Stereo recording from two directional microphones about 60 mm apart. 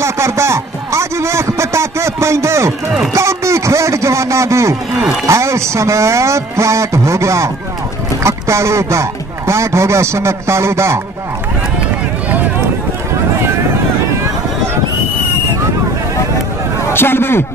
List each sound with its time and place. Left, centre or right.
0.0 s a sound: right
5.2 s speech: right
16.9 s a man's voice: left